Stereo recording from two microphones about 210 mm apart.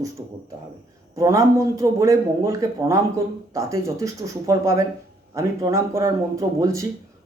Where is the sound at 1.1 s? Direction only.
15° right (ahead or behind).